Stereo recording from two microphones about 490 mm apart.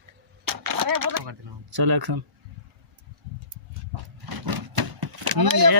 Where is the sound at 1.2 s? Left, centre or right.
Right.